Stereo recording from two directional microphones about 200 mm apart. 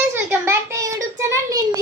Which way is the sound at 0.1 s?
10° right (ahead or behind).